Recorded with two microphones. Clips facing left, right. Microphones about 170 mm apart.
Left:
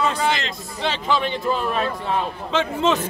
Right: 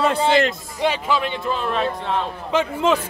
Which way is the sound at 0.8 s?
10° right (ahead or behind).